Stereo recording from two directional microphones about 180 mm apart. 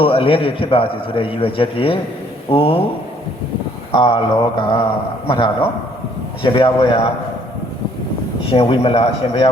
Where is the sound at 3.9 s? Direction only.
30° left (ahead or behind).